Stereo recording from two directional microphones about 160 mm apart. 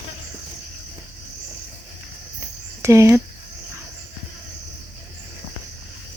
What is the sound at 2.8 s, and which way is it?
Speech, 15° right (ahead or behind).